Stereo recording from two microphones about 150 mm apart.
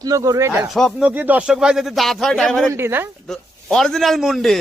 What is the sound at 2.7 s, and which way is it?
Speech, 15° right (ahead or behind).